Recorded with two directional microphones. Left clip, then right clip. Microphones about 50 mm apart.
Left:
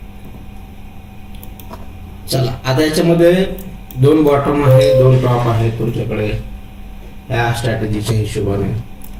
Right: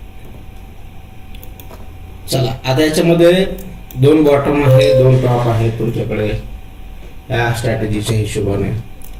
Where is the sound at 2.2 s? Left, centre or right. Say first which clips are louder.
Right 1 dB; centre.